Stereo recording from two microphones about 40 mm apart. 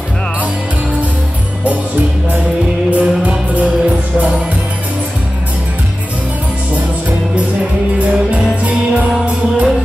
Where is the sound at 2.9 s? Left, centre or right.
Right.